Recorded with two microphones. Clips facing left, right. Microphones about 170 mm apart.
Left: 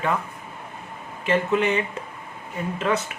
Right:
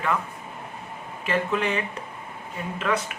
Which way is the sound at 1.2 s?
25° left (ahead or behind).